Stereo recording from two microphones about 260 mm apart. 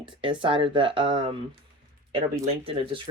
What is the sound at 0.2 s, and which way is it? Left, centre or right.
Speech, centre.